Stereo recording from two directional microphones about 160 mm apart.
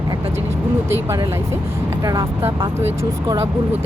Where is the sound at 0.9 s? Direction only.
20° right (ahead or behind).